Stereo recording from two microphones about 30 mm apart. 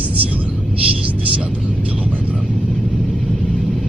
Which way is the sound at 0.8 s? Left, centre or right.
Right.